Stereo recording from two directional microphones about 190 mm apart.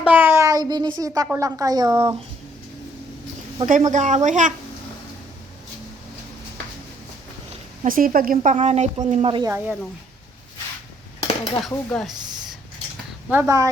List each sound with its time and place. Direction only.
0.0 s a woman's voice: 10° right (ahead or behind)
3.7 s a woman's voice: 40° right (ahead or behind)
7.9 s a woman's voice: 50° right (ahead or behind)
8.5 s a woman's voice: 35° right (ahead or behind)
9.2 s a woman's voice: 25° right (ahead or behind)
11.2 s dishes: 25° left (ahead or behind)
11.9 s speech: centre (ahead or behind)
12.1 s a sound: 20° right (ahead or behind)
13.3 s speech: 15° right (ahead or behind)